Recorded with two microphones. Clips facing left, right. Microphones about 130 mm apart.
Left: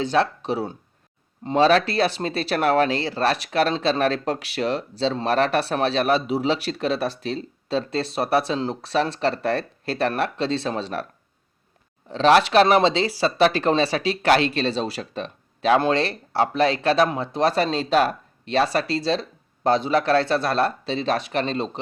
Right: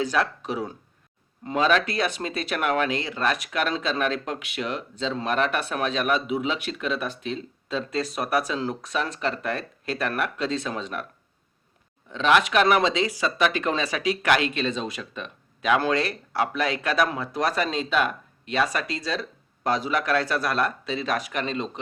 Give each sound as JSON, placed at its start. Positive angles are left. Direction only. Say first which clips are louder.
{"t": 0.0, "sound": "speech", "louder": "left 4 dB", "side_deg": 30}
{"t": 12.0, "sound": "speech", "louder": "left 5 dB", "side_deg": 35}